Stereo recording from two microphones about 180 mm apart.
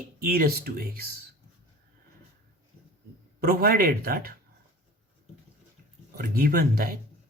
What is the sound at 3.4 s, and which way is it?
Speech, 55° right (ahead or behind).